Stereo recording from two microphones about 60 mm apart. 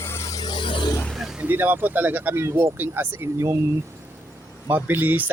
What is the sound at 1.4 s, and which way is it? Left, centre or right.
Speech, right.